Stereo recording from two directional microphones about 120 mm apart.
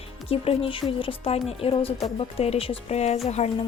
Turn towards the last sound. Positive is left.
turn(degrees=65)  # may be behind; listen again after turning